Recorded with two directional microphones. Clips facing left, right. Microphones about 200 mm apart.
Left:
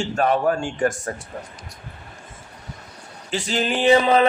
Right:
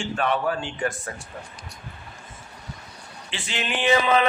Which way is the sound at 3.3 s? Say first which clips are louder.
Left 7 dB; 40° left (ahead or behind).